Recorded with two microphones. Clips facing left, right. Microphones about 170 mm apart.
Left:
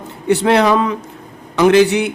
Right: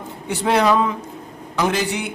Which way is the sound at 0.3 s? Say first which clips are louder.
Left 5 dB; 70° left (ahead or behind).